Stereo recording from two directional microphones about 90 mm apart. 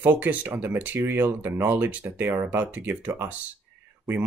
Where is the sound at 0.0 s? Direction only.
20° right (ahead or behind).